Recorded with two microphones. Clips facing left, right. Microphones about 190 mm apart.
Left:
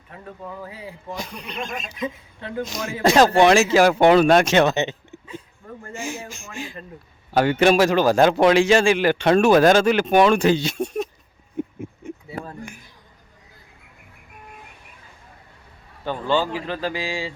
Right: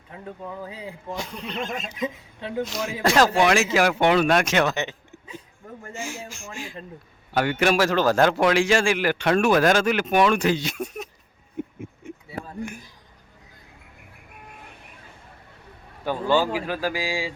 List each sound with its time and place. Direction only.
0.1 s speech: 15° right (ahead or behind)
1.1 s speech: 15° left (ahead or behind)
1.8 s a woman's voice: 20° right (ahead or behind)
3.0 s speech: 20° left (ahead or behind)
6.0 s speech: 20° left (ahead or behind)
16.0 s speech: 10° right (ahead or behind)